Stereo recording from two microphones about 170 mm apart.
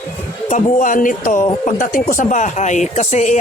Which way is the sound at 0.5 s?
50° left (ahead or behind).